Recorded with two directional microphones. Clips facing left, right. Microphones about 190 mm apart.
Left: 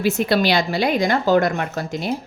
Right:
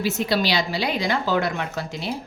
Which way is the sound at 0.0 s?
55° left (ahead or behind).